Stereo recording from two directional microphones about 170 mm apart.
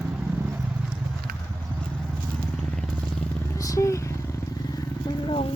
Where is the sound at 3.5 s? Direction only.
20° left (ahead or behind).